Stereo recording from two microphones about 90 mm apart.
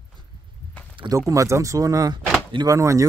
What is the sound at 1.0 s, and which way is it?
Speech, 35° right (ahead or behind).